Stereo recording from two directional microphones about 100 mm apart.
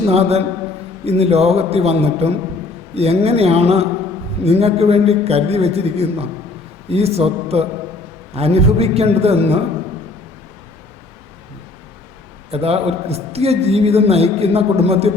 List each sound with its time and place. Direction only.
0.1 s a man's voice: 90° right
12.5 s a man's voice: 85° right